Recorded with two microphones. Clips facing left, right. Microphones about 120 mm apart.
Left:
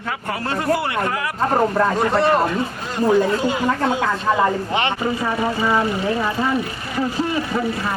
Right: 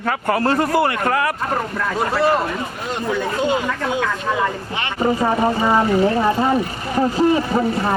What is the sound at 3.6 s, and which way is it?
Speech, 35° left (ahead or behind).